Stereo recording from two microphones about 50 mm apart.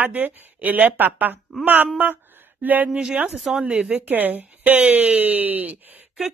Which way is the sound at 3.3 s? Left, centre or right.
Centre.